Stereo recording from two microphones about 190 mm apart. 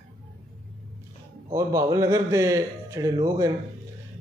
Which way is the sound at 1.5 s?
15° right (ahead or behind).